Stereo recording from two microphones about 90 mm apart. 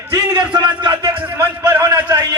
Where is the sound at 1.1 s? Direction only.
15° right (ahead or behind).